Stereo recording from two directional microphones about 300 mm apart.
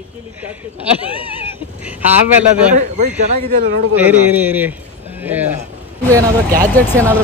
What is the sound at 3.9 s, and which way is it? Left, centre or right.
Speech, centre.